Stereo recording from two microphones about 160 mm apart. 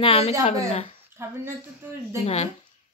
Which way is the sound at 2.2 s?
40° left (ahead or behind).